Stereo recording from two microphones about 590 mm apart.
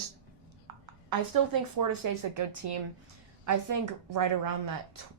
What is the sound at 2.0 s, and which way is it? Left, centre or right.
Speech, right.